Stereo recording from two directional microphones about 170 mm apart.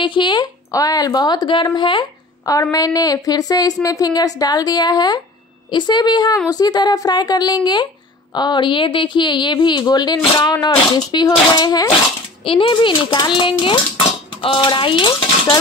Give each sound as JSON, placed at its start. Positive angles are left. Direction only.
{"t": 0.0, "sound": "a woman's voice", "side_deg": 30}
{"t": 14.4, "sound": "cutlery", "side_deg": 30}